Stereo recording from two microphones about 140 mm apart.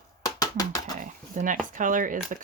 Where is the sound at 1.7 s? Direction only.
70° right (ahead or behind).